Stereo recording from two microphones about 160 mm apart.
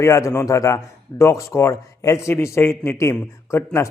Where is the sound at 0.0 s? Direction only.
15° left (ahead or behind).